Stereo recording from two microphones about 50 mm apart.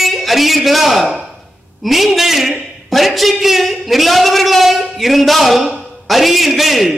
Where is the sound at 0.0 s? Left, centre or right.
Centre.